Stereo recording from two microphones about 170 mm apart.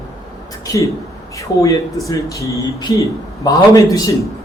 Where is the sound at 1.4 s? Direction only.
20° left (ahead or behind).